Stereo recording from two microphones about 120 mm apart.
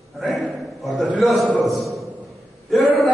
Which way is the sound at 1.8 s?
Centre (ahead or behind).